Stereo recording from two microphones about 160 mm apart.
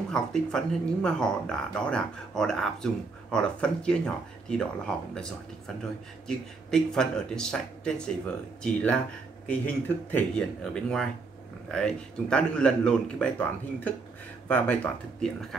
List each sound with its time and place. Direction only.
0.1 s speech: 5° left (ahead or behind)
6.2 s speech: 5° left (ahead or behind)
9.5 s speech: 10° left (ahead or behind)